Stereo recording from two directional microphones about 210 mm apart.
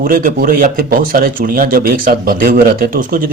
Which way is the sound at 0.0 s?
40° right (ahead or behind).